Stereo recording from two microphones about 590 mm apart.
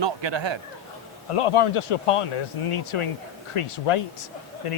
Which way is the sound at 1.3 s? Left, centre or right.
Left.